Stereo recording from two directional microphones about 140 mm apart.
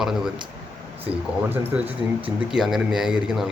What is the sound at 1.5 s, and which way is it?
Speech, 15° right (ahead or behind).